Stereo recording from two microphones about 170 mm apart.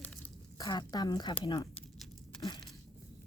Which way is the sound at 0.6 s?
25° left (ahead or behind).